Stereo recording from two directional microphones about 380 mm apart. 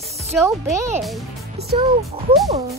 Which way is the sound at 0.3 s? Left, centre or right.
Centre.